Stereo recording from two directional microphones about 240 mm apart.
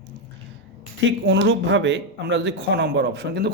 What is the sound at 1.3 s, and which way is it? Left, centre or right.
A man's voice, right.